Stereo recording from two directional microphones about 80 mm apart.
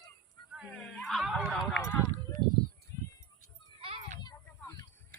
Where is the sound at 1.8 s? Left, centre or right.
Left.